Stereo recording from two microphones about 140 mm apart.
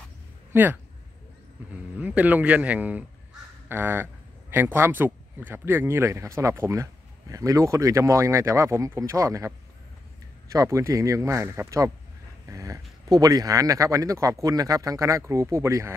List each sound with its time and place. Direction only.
0.5 s speech: 15° right (ahead or behind)
10.5 s speech: 20° right (ahead or behind)